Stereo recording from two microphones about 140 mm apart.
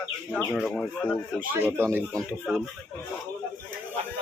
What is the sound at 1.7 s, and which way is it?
Speech, 15° right (ahead or behind).